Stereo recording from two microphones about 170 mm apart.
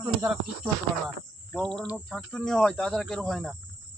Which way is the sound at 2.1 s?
5° left (ahead or behind).